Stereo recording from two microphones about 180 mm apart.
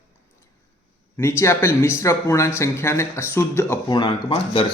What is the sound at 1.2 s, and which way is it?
Speech, 15° left (ahead or behind).